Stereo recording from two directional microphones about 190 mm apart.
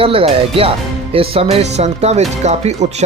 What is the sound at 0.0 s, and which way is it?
Speech, 30° right (ahead or behind).